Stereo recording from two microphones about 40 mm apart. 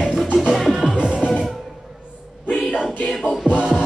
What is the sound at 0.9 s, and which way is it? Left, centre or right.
Music, right.